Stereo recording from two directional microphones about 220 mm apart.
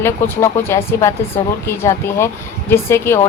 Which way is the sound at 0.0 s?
10° left (ahead or behind).